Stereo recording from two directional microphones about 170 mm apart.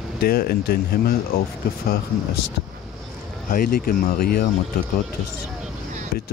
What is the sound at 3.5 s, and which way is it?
Speech, 60° left (ahead or behind).